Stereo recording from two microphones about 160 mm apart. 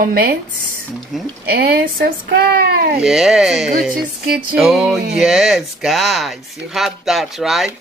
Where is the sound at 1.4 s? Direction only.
75° right (ahead or behind).